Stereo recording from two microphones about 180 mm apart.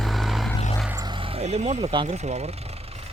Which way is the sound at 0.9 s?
20° right (ahead or behind).